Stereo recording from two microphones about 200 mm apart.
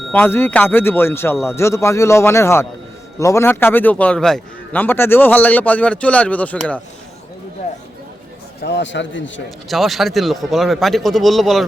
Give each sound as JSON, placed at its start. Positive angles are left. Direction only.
{"t": 0.1, "sound": "a man's voice", "side_deg": 10}
{"t": 8.6, "sound": "a man's voice", "side_deg": 60}
{"t": 9.6, "sound": "a man's voice", "side_deg": 0}